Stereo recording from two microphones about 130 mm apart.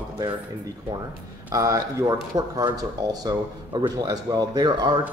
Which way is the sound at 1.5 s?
25° right (ahead or behind).